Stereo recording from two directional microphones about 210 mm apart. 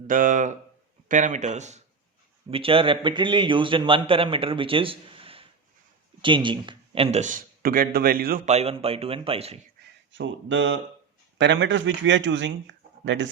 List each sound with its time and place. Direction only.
0.1 s a man's voice: 40° right (ahead or behind)
10.1 s a man's voice: 65° right (ahead or behind)